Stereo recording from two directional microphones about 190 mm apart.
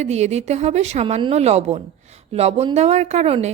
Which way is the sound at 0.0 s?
35° right (ahead or behind).